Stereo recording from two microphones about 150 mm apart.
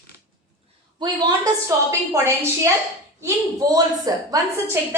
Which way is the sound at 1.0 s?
30° right (ahead or behind).